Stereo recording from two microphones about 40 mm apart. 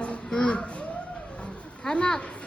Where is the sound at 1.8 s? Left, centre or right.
Centre.